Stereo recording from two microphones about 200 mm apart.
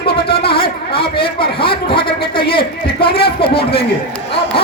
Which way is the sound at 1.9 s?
25° left (ahead or behind).